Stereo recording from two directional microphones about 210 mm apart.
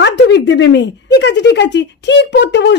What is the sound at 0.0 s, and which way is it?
Speech, 55° left (ahead or behind).